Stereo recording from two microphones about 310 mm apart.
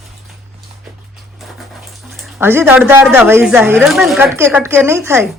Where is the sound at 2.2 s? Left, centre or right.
Centre.